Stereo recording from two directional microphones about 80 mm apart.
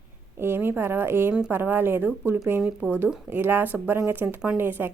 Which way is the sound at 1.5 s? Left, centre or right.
Right.